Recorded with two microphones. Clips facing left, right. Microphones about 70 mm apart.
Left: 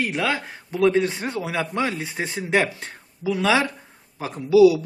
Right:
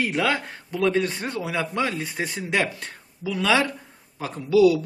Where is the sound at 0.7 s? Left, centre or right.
Left.